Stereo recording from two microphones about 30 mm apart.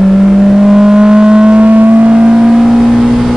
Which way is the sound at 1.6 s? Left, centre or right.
Right.